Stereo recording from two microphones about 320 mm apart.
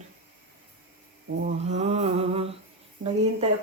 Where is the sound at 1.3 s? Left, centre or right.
Right.